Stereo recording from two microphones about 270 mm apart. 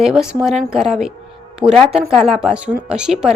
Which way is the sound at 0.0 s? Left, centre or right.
Centre.